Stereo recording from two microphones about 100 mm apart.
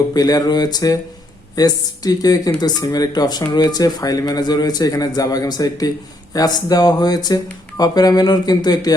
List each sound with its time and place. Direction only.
0.1 s speech: 40° left (ahead or behind)